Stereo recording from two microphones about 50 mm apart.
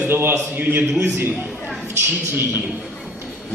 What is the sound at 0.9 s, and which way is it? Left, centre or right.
Speech, right.